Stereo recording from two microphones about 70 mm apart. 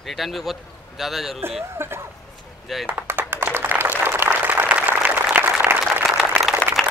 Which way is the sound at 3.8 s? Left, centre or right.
Right.